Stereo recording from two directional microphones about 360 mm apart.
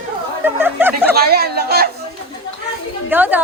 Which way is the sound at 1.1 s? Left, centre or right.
Right.